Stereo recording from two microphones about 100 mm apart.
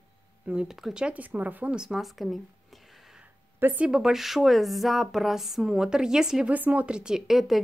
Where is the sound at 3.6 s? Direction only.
20° right (ahead or behind).